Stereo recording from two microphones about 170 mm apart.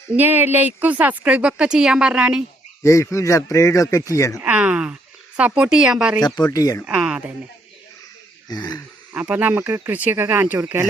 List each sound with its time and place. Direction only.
0.1 s a woman's voice: 10° right (ahead or behind)
2.8 s speech: 15° left (ahead or behind)
4.4 s a sound: 10° right (ahead or behind)
5.4 s speech: 5° right (ahead or behind)
6.2 s speech: 25° left (ahead or behind)
6.8 s speech: 5° right (ahead or behind)
8.4 s speech: 25° left (ahead or behind)
9.1 s a woman's voice: 10° right (ahead or behind)